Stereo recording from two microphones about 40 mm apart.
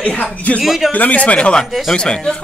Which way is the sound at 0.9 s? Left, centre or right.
Left.